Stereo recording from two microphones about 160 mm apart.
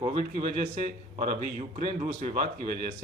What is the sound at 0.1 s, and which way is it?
A man's voice, 50° right (ahead or behind).